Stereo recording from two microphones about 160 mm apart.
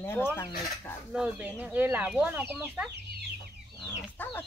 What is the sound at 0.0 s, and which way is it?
Chicken, 15° left (ahead or behind).